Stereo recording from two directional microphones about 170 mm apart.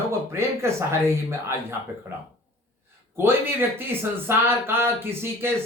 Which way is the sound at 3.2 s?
15° right (ahead or behind).